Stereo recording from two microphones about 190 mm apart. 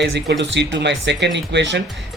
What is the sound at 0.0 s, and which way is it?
Speech, 65° right (ahead or behind).